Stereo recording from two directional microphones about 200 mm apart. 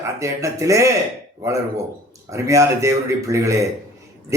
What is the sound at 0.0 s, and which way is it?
A man's voice, 15° right (ahead or behind).